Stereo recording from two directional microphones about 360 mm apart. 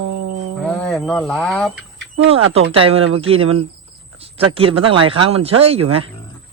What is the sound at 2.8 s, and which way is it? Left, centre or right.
Speech, centre.